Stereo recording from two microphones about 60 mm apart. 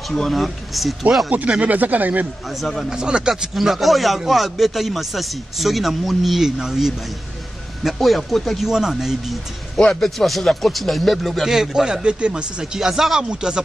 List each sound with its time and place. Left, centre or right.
0.1 s speech: centre
1.3 s speech: right
2.5 s speech: centre
2.9 s speech: centre
9.8 s speech: centre
11.5 s speech: centre
12.7 s speech: centre